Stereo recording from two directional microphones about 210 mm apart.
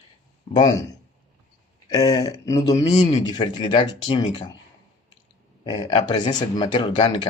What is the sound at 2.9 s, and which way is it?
Speech, 30° left (ahead or behind).